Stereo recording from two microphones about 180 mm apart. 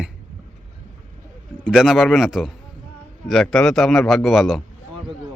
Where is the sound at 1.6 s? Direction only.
5° right (ahead or behind).